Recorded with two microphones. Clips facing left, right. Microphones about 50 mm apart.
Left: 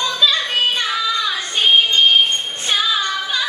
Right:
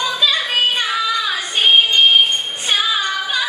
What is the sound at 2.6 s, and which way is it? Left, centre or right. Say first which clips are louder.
Music: even; centre.